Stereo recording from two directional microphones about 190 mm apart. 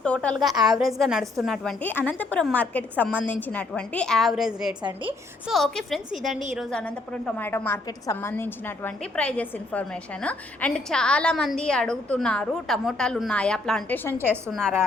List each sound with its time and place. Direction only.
0.0 s a woman's voice: 5° left (ahead or behind)
4.8 s a woman's voice: 25° right (ahead or behind)
5.5 s a woman's voice: centre (ahead or behind)
14.2 s a woman's voice: 10° right (ahead or behind)
14.5 s a woman's voice: centre (ahead or behind)